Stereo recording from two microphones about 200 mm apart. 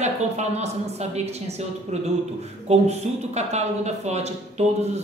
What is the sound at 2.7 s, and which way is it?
Speech, 30° right (ahead or behind).